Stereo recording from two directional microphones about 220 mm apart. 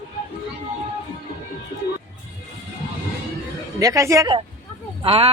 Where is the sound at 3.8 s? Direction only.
15° right (ahead or behind).